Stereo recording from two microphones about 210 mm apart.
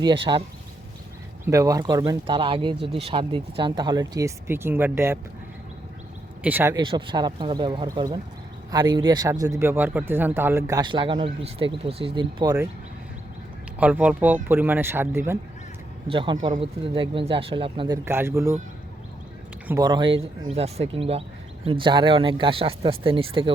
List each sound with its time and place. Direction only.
0.0 s speech: 20° right (ahead or behind)
1.5 s speech: 15° right (ahead or behind)
6.4 s speech: 10° right (ahead or behind)
13.7 s speech: 5° right (ahead or behind)
16.0 s speech: 25° right (ahead or behind)
19.6 s speech: 15° right (ahead or behind)